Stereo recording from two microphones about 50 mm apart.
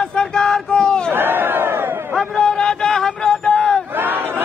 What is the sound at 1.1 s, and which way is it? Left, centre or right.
Crowd, right.